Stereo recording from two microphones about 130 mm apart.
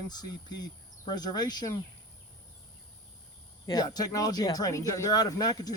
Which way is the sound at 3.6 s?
30° left (ahead or behind).